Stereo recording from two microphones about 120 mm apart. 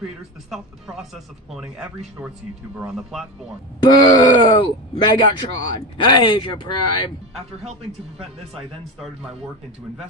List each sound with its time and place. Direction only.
0.5 s speech: centre (ahead or behind)
3.8 s speech: 40° left (ahead or behind)